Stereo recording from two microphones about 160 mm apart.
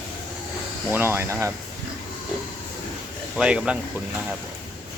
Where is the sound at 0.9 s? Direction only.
15° right (ahead or behind).